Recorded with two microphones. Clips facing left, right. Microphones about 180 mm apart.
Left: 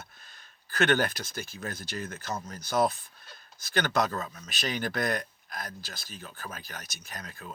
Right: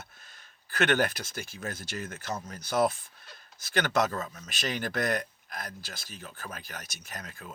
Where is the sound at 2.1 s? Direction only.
45° left (ahead or behind).